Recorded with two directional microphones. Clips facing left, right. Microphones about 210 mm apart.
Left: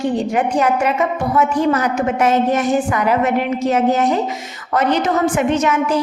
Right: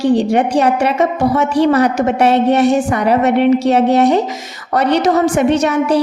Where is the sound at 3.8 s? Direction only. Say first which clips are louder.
Right 4 dB; 70° right (ahead or behind).